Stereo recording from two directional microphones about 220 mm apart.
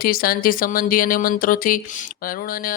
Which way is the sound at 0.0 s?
40° left (ahead or behind).